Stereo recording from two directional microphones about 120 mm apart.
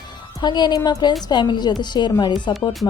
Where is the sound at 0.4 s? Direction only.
35° left (ahead or behind).